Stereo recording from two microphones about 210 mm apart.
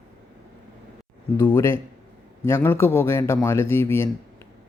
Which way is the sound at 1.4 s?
15° left (ahead or behind).